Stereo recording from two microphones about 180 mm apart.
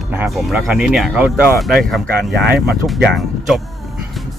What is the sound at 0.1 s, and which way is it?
Speech, 5° right (ahead or behind).